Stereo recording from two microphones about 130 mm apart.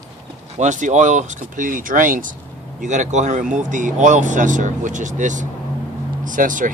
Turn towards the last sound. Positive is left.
turn(degrees=-90)